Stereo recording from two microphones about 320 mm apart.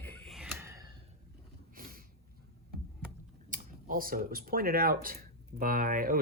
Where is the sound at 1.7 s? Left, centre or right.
Right.